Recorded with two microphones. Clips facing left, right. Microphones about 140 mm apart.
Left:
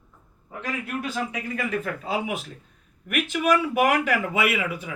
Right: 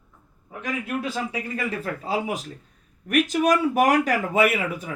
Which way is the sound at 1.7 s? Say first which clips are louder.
Left 1 dB; 40° right (ahead or behind).